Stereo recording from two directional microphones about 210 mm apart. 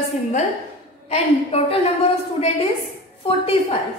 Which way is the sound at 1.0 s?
30° left (ahead or behind).